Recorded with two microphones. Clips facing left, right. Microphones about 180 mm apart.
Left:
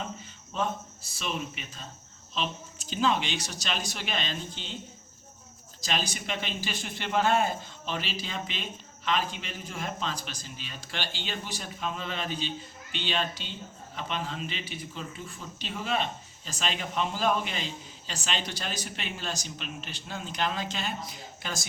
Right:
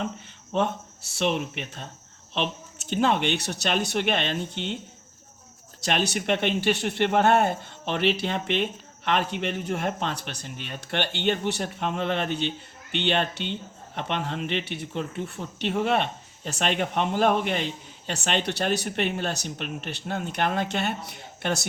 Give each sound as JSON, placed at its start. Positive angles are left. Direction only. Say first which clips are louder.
{"t": 0.5, "sound": "speech", "louder": "right 6 dB", "side_deg": -65}
{"t": 5.8, "sound": "speech", "louder": "right 7 dB", "side_deg": -70}